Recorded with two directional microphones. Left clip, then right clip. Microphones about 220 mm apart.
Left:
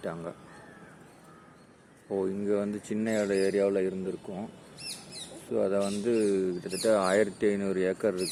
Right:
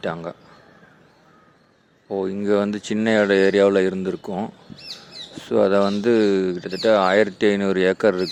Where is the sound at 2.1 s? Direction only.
15° right (ahead or behind).